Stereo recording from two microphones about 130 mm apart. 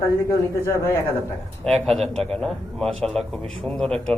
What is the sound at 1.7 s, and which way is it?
A man's voice, centre (ahead or behind).